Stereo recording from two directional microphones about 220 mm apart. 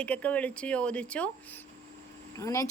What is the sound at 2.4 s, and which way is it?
Speech, 15° left (ahead or behind).